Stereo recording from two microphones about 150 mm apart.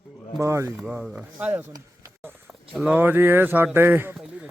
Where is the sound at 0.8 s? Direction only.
10° right (ahead or behind).